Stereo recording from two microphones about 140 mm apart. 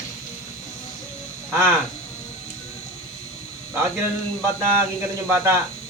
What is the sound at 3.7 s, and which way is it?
Speech, 15° right (ahead or behind).